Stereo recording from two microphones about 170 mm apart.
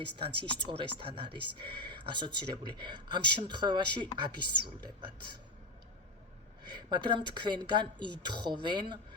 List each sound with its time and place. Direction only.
0.2 s speech: 30° right (ahead or behind)
6.6 s speech: 25° right (ahead or behind)